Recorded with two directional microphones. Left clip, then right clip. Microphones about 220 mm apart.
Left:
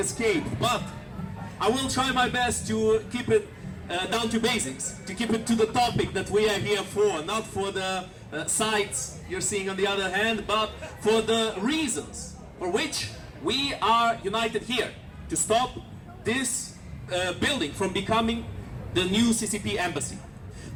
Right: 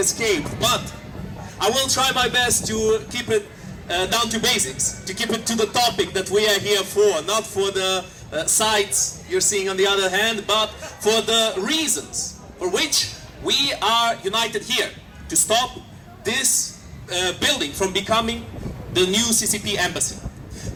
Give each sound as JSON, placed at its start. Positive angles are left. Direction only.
{"t": 0.0, "sound": "a man's voice", "side_deg": -40}